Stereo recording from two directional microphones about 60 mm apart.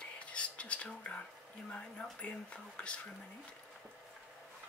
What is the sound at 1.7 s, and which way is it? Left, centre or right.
Speech, left.